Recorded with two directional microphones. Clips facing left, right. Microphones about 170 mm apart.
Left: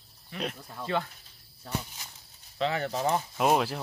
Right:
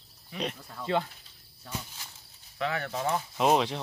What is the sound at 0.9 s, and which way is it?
Speech, 20° right (ahead or behind).